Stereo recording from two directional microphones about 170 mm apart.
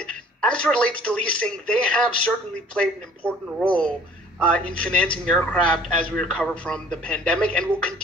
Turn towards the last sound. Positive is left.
turn(degrees=5)  # may be behind; listen again after turning